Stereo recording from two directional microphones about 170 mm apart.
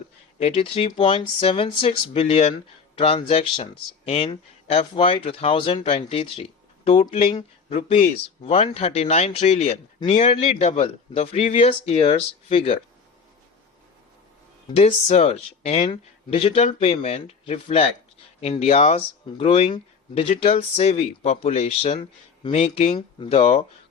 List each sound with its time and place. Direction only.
0.3 s speech: 35° left (ahead or behind)
14.7 s speech: 40° left (ahead or behind)